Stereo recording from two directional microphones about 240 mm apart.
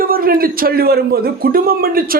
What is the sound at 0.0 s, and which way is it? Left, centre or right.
A man's voice, right.